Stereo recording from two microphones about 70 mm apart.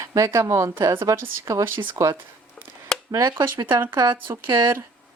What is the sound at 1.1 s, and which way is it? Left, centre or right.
Speech, right.